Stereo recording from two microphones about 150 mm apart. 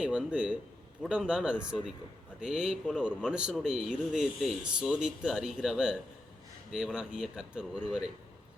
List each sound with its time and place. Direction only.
0.0 s speech: 10° right (ahead or behind)